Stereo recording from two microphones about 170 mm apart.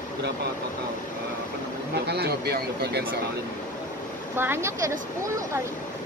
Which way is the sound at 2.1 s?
70° right (ahead or behind).